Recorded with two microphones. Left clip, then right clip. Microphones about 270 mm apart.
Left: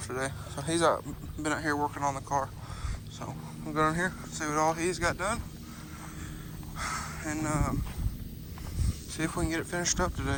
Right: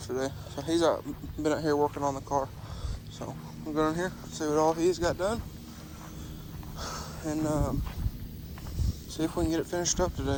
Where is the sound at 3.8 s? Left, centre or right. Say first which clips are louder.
Left 1 dB; centre.